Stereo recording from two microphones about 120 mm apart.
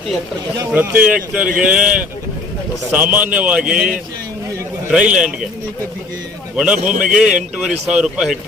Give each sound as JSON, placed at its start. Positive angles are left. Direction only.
{"t": 0.7, "sound": "speech", "side_deg": -10}
{"t": 6.6, "sound": "speech", "side_deg": -5}